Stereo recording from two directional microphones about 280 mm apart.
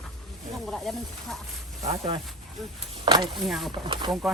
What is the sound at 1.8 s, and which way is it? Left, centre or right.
Speech, centre.